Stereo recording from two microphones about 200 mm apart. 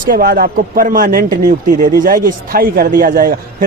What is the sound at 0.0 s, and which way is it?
Speech, 45° right (ahead or behind).